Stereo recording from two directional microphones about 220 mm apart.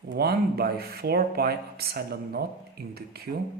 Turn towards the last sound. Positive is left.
turn(degrees=-45)  # may be behind; listen again after turning